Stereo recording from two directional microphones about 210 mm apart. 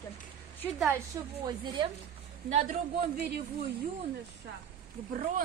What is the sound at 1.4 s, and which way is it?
Speech, 20° right (ahead or behind).